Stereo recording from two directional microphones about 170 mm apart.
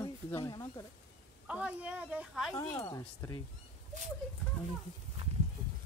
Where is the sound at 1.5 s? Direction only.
5° right (ahead or behind).